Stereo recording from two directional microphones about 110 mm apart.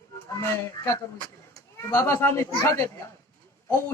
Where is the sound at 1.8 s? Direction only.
30° left (ahead or behind).